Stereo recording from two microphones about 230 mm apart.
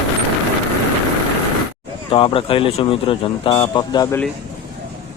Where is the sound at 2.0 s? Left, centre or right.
Left.